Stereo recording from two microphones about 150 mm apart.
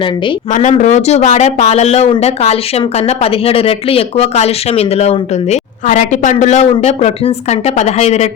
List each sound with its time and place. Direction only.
0.5 s speech: 55° left (ahead or behind)
5.8 s speech: 55° left (ahead or behind)